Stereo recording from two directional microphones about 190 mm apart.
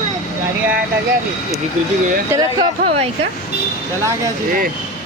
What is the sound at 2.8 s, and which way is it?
Speech, 35° right (ahead or behind).